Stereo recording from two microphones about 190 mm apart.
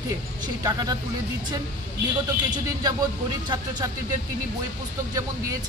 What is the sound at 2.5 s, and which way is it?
Speech, 20° right (ahead or behind).